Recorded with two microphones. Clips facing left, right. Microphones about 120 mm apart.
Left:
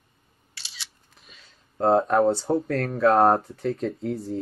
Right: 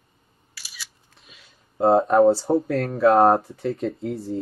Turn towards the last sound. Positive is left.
turn(degrees=0)  # may be behind; listen again after turning